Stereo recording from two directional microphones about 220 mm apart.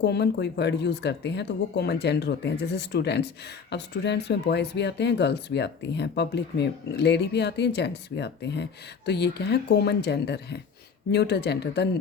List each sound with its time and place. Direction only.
0.0 s speech: 50° left (ahead or behind)